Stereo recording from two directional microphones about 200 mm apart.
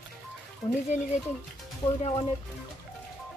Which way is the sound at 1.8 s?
20° left (ahead or behind).